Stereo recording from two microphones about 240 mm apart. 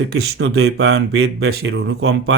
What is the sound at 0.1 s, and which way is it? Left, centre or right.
Speech, right.